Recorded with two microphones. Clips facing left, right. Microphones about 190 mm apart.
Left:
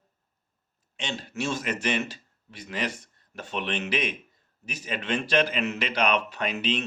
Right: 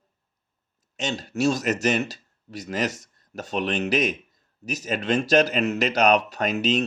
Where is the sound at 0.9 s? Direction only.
40° right (ahead or behind).